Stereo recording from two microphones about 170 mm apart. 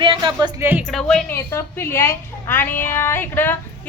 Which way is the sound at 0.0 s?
30° right (ahead or behind).